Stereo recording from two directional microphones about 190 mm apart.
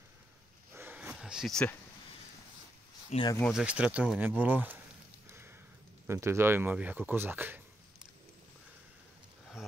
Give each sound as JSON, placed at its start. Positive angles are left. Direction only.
{"t": 0.7, "sound": "a sound", "side_deg": -10}
{"t": 3.1, "sound": "speech", "side_deg": 25}
{"t": 3.5, "sound": "speech", "side_deg": -5}
{"t": 6.0, "sound": "speech", "side_deg": -15}